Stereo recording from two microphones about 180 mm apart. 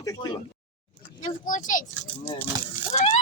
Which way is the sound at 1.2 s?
45° left (ahead or behind).